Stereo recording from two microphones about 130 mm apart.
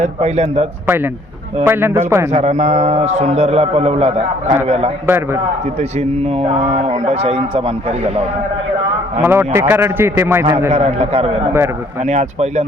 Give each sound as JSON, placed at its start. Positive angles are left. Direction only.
{"t": 0.0, "sound": "a man's voice", "side_deg": -55}
{"t": 0.9, "sound": "a man's voice", "side_deg": -15}
{"t": 2.3, "sound": "a man's voice", "side_deg": -60}
{"t": 5.0, "sound": "a man's voice", "side_deg": -20}
{"t": 6.0, "sound": "a man's voice", "side_deg": -55}
{"t": 9.2, "sound": "a man's voice", "side_deg": -15}
{"t": 10.7, "sound": "a man's voice", "side_deg": -60}
{"t": 12.0, "sound": "a man's voice", "side_deg": -60}